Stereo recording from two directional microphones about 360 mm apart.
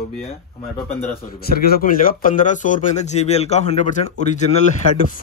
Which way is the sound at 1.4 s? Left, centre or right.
Left.